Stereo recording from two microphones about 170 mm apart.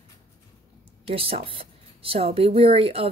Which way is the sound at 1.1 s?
35° right (ahead or behind).